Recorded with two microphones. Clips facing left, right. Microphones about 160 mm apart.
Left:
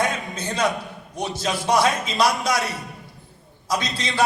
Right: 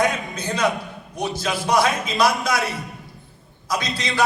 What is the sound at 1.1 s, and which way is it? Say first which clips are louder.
A man's voice: right 1 dB; 30° left (ahead or behind).